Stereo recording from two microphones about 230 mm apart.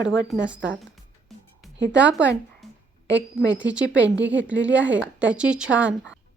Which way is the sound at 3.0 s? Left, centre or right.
Right.